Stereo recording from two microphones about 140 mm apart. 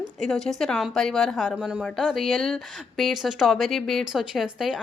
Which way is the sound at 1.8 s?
5° left (ahead or behind).